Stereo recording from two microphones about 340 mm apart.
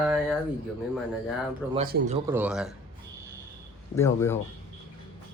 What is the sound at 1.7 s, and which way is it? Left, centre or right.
Speech, right.